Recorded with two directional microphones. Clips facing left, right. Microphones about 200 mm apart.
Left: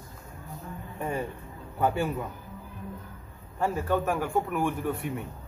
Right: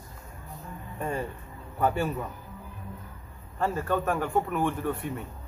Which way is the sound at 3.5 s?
10° left (ahead or behind).